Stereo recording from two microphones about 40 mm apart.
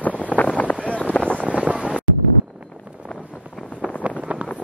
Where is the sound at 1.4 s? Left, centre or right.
Right.